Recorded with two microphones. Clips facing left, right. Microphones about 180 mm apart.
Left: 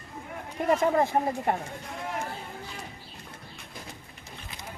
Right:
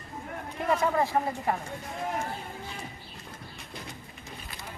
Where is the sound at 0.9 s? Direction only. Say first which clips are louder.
Left 2 dB; 25° left (ahead or behind).